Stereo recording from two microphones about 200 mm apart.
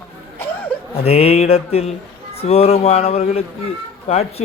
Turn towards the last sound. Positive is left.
turn(degrees=30)  # may be behind; listen again after turning